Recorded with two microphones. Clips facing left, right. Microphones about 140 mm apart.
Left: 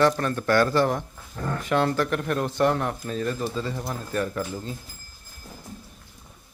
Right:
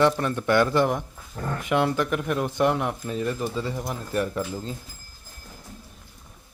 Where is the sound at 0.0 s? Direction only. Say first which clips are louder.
Even; 15° right (ahead or behind).